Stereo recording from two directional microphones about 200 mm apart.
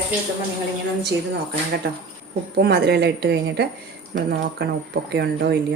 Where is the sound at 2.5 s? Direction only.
55° right (ahead or behind).